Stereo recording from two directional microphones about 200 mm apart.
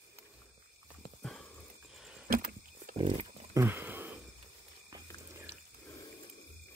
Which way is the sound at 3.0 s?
25° right (ahead or behind).